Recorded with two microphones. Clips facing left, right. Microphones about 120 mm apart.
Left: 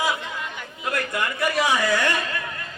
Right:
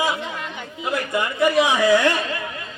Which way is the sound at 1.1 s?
20° right (ahead or behind).